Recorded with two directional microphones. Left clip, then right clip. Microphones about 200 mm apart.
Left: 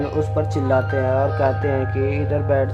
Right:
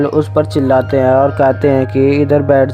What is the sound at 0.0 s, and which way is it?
Speech, 35° right (ahead or behind).